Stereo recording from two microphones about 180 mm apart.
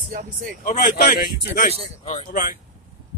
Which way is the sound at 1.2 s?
55° left (ahead or behind).